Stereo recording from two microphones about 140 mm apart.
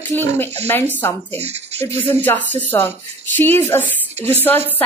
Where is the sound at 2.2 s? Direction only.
15° left (ahead or behind).